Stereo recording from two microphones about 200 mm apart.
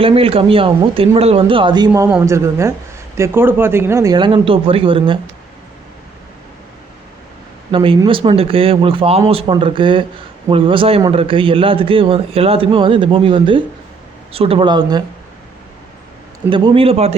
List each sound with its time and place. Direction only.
0.0 s a man's voice: 30° right (ahead or behind)
1.9 s a woman's voice: 10° right (ahead or behind); by 5.2 s 25° right (ahead or behind)
7.7 s a man's voice: 25° right (ahead or behind)
16.5 s a man's voice: 25° right (ahead or behind)